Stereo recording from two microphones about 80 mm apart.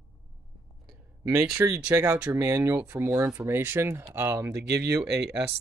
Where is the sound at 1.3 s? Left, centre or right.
Right.